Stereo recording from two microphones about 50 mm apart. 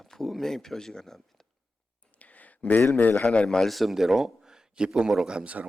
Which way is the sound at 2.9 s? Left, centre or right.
Left.